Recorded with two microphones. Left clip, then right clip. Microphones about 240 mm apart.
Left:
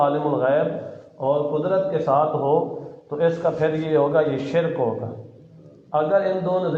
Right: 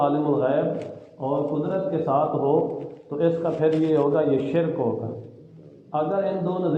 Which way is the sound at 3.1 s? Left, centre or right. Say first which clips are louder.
Left 2 dB; left.